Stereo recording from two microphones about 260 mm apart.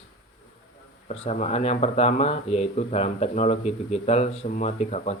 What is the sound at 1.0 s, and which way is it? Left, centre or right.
Speech, left.